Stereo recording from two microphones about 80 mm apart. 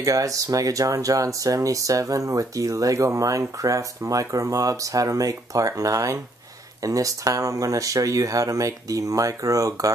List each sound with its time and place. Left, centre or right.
0.0 s speech: right